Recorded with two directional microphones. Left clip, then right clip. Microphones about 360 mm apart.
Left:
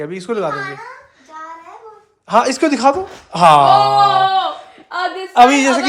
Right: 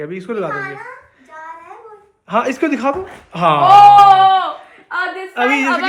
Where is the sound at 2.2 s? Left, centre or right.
Centre.